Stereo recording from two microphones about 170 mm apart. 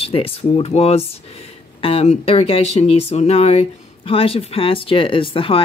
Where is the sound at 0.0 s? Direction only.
35° left (ahead or behind).